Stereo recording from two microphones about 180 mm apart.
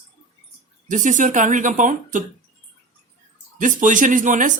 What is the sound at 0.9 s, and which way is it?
Speech, 45° right (ahead or behind).